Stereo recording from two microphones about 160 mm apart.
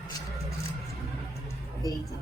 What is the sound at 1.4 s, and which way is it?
Music, 25° left (ahead or behind).